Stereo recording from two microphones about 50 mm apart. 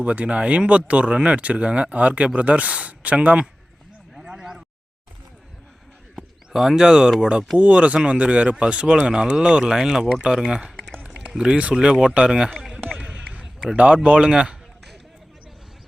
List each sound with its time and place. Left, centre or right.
0.0 s speech: right
4.1 s a sound: centre
6.1 s bird: centre
7.2 s speech: centre
11.0 s a sound: right
11.4 s speech: right
12.5 s run: centre
13.1 s a sound: centre
13.7 s speech: right